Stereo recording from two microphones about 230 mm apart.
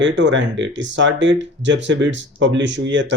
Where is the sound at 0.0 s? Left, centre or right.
Right.